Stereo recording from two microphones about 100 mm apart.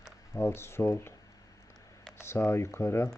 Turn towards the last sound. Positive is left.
turn(degrees=25)  # may be behind; listen again after turning